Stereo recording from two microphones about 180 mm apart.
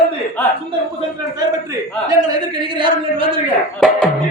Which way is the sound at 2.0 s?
20° right (ahead or behind).